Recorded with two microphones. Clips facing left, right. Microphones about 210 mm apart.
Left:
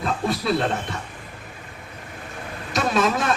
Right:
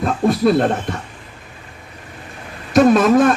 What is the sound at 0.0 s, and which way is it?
Speech, 50° right (ahead or behind).